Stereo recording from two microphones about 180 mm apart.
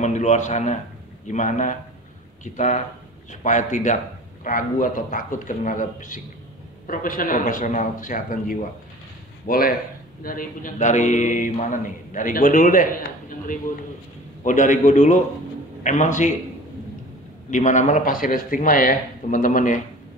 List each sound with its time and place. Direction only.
0.0 s a man's voice: 40° left (ahead or behind)
14.4 s a man's voice: 45° left (ahead or behind)
17.5 s a man's voice: 45° left (ahead or behind)